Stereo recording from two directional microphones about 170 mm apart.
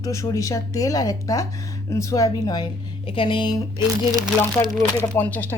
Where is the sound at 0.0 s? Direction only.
20° left (ahead or behind).